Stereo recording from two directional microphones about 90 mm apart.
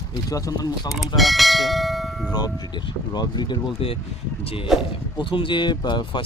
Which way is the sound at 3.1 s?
50° left (ahead or behind).